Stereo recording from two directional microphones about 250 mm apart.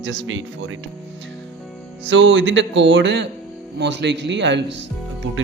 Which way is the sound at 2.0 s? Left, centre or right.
Right.